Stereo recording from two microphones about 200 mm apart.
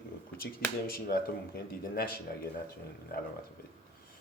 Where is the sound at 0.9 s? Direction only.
50° left (ahead or behind).